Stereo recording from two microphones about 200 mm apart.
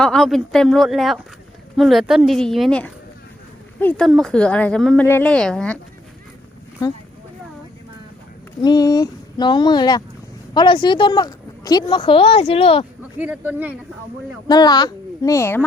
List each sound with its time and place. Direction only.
0.0 s speech: 5° left (ahead or behind)
8.6 s a woman's voice: 20° left (ahead or behind)
13.0 s speech: 5° right (ahead or behind)
14.4 s a woman's voice: 20° left (ahead or behind)